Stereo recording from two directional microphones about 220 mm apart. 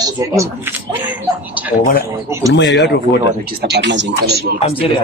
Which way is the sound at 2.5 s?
50° left (ahead or behind).